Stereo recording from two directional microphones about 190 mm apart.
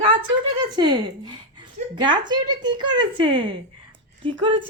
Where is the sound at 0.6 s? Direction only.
25° right (ahead or behind).